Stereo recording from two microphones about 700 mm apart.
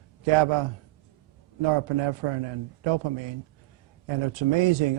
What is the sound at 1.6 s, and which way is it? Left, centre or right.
Speech, right.